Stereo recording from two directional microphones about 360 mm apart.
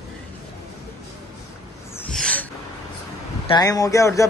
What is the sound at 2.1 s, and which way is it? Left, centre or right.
Gasp, centre.